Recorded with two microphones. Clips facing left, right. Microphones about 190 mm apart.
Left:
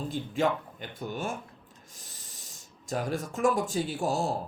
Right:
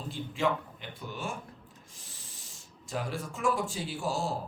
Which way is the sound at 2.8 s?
45° left (ahead or behind).